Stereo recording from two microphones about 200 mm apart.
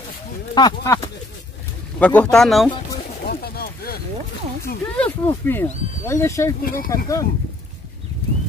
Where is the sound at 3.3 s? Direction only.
50° left (ahead or behind).